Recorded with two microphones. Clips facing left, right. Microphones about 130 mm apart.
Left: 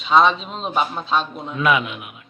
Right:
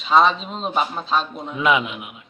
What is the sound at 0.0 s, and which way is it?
A man's voice, centre (ahead or behind).